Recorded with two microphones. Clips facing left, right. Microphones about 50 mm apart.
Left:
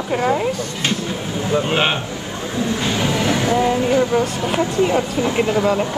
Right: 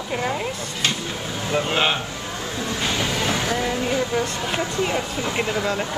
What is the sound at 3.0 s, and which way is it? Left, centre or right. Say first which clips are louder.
Music: left 7 dB; left.